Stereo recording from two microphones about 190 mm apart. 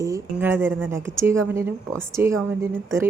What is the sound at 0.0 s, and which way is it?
Speech, 15° right (ahead or behind).